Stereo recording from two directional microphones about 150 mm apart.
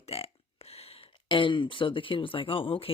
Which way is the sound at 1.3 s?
35° left (ahead or behind).